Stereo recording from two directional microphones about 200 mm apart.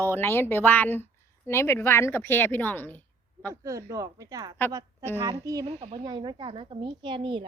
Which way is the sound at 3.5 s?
15° right (ahead or behind).